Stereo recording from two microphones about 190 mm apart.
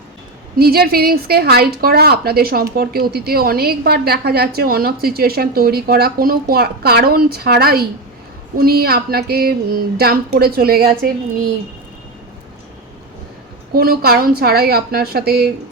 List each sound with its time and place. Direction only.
0.5 s speech: 55° right (ahead or behind)
13.7 s speech: 55° right (ahead or behind)